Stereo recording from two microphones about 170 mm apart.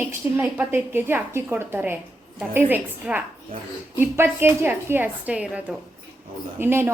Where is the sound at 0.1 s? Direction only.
10° right (ahead or behind).